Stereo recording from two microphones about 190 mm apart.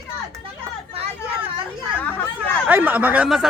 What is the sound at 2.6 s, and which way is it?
Speech, 10° right (ahead or behind).